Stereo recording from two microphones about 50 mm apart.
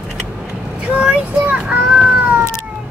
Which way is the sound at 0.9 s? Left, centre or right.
Right.